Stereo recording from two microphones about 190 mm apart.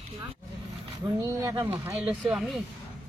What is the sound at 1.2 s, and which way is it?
Speech, 15° right (ahead or behind).